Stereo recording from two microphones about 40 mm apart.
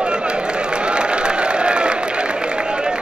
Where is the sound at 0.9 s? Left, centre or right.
Right.